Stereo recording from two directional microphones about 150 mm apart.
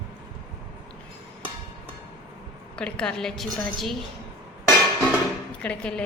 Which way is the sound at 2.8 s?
5° left (ahead or behind).